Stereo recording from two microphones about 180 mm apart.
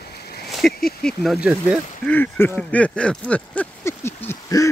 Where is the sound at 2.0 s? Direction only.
10° left (ahead or behind).